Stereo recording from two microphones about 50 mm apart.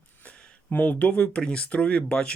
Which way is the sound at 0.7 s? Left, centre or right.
Left.